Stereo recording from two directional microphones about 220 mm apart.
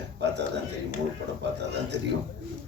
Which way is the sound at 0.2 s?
50° right (ahead or behind).